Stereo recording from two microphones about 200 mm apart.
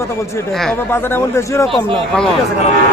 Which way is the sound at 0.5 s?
5° left (ahead or behind).